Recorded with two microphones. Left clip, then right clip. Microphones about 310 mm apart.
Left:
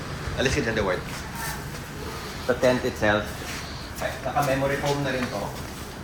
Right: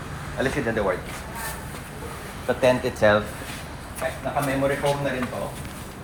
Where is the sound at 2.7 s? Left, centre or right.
Right.